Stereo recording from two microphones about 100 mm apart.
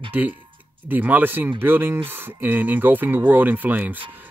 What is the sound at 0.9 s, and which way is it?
Speech, 20° right (ahead or behind).